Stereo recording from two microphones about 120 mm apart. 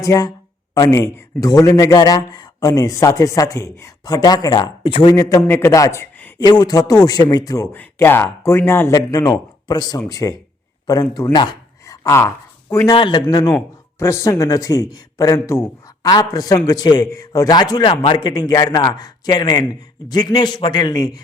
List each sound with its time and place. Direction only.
0.0 s speech: 30° left (ahead or behind); by 5.1 s 45° left (ahead or behind)
5.1 s a man's voice: 25° left (ahead or behind)
7.7 s a man's voice: 20° left (ahead or behind); by 11.5 s 40° left (ahead or behind)
11.9 s a sound: 25° left (ahead or behind)
12.7 s speech: 25° left (ahead or behind)
13.0 s a man's voice: 40° left (ahead or behind)